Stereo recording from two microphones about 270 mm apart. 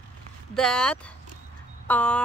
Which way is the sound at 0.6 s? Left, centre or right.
Centre.